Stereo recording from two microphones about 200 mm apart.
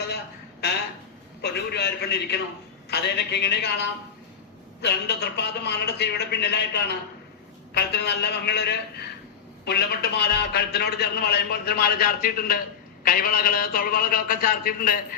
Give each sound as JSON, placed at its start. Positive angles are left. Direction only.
{"t": 1.4, "sound": "a man's voice", "side_deg": 55}